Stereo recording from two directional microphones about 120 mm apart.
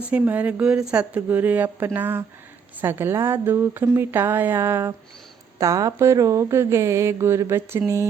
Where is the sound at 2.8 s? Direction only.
20° right (ahead or behind).